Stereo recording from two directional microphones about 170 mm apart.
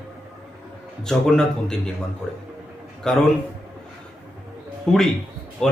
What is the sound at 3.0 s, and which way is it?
Speech, 5° left (ahead or behind).